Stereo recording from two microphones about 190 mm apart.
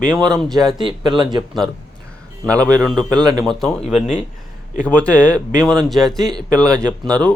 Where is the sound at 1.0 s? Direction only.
25° right (ahead or behind).